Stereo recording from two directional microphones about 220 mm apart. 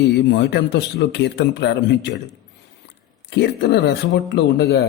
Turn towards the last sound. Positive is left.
turn(degrees=50)  # may be behind; listen again after turning